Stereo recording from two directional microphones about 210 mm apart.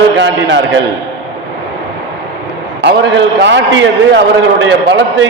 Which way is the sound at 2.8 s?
55° right (ahead or behind).